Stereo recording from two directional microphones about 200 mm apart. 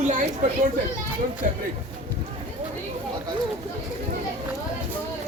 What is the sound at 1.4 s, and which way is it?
Speech, 40° right (ahead or behind).